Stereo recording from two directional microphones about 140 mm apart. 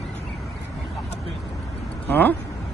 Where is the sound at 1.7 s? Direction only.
15° left (ahead or behind).